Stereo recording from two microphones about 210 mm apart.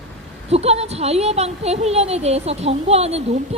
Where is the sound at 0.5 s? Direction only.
30° right (ahead or behind).